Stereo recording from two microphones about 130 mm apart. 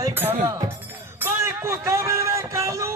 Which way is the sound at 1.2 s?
20° right (ahead or behind).